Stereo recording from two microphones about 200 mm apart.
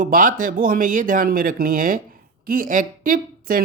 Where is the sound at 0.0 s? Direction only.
40° right (ahead or behind).